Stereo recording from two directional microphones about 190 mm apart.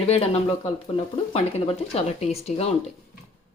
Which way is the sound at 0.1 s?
30° left (ahead or behind).